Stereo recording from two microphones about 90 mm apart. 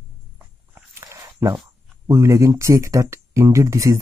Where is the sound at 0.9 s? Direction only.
35° right (ahead or behind).